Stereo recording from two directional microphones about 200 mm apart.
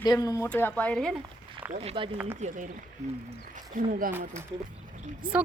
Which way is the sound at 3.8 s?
45° right (ahead or behind).